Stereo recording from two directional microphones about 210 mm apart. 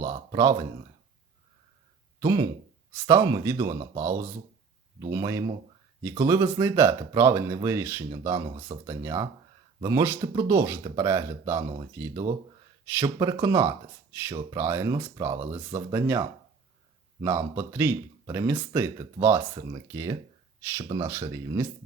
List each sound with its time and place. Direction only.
0.0 s a sound: 35° right (ahead or behind)
0.3 s speech: 15° right (ahead or behind)
2.2 s speech: 15° right (ahead or behind)
8.5 s speech: 25° right (ahead or behind)
8.9 s speech: 15° right (ahead or behind)
17.2 s speech: 10° right (ahead or behind)